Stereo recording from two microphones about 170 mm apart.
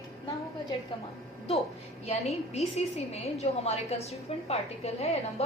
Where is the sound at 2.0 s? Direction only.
40° left (ahead or behind).